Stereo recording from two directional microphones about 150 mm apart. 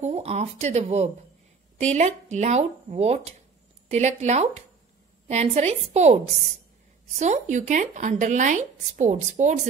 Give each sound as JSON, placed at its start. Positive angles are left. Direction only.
{"t": 0.0, "sound": "speech", "side_deg": -45}